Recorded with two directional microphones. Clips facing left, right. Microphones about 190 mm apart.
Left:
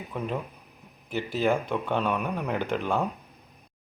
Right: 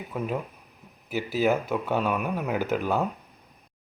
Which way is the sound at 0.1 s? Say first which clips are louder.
Right 2 dB; 5° right (ahead or behind).